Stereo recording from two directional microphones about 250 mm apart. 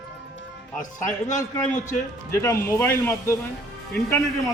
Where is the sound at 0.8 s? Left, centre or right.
Left.